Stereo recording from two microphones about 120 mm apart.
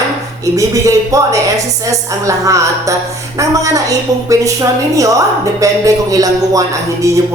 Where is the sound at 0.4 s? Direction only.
25° right (ahead or behind).